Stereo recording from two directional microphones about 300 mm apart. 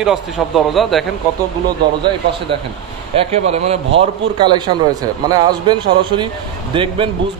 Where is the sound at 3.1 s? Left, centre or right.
Right.